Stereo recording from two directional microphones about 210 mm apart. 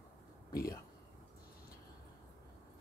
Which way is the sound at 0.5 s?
45° left (ahead or behind).